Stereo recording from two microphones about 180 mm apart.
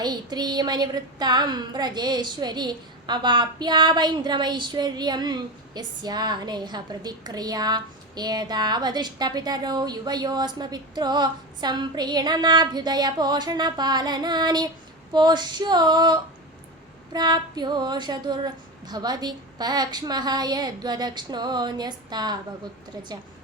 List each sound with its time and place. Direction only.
0.0 s a woman's voice: 25° right (ahead or behind)